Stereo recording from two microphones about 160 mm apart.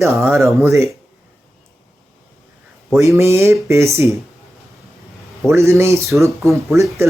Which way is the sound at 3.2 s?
15° right (ahead or behind).